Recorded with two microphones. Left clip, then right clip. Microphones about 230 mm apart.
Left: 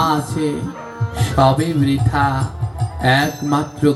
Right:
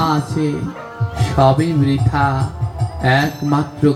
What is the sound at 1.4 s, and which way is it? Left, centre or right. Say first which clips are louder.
Speech: right 1 dB; left.